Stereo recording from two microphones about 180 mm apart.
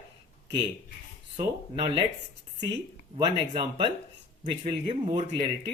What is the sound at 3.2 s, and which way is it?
Speech, 25° right (ahead or behind).